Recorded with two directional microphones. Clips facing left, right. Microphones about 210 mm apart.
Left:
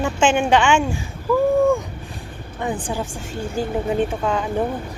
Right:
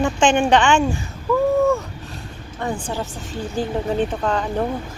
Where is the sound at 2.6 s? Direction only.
15° left (ahead or behind).